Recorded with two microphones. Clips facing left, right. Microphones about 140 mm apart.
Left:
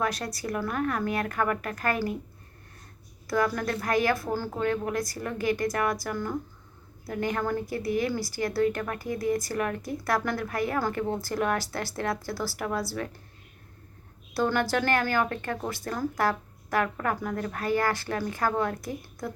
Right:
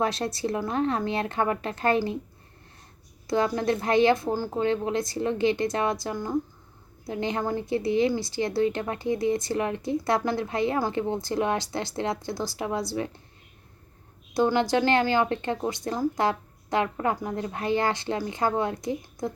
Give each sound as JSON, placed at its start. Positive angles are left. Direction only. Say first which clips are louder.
{"t": 0.0, "sound": "speech", "louder": "right 4 dB", "side_deg": -25}
{"t": 3.2, "sound": "speech", "louder": "right 3 dB", "side_deg": -25}
{"t": 14.3, "sound": "speech", "louder": "right 3 dB", "side_deg": -20}